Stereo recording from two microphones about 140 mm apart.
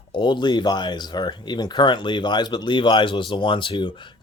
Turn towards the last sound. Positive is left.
turn(degrees=35)  # may be behind; listen again after turning